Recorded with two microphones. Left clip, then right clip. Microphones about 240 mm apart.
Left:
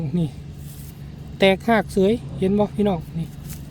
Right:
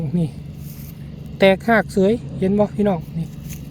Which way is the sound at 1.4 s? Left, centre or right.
Centre.